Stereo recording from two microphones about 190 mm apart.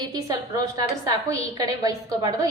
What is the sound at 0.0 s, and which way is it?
A woman's voice, 20° right (ahead or behind).